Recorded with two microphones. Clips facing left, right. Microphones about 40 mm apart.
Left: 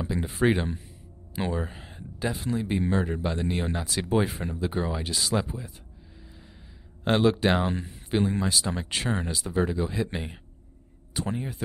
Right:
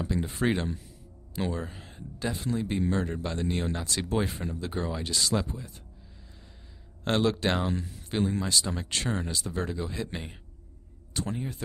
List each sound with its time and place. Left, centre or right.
0.0 s speech: centre
7.1 s speech: centre
7.6 s speech: left
8.1 s speech: centre
11.1 s speech: centre